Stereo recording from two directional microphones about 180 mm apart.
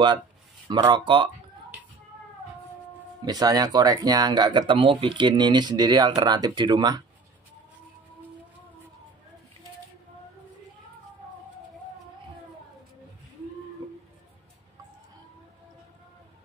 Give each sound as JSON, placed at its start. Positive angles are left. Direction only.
{"t": 0.7, "sound": "speech", "side_deg": -25}
{"t": 3.3, "sound": "speech", "side_deg": -20}